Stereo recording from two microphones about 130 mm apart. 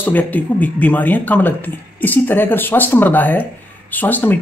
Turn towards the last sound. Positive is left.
turn(degrees=15)  # may be behind; listen again after turning